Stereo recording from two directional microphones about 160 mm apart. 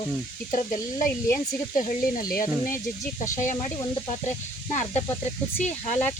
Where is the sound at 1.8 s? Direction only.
65° left (ahead or behind).